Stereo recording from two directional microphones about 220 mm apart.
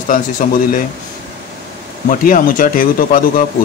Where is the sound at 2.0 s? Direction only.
40° left (ahead or behind).